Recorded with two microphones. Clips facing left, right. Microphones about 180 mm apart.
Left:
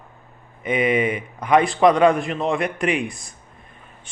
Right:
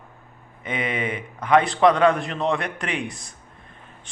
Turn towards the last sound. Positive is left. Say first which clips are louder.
# left 5 dB
turn(degrees=10)  # may be behind; listen again after turning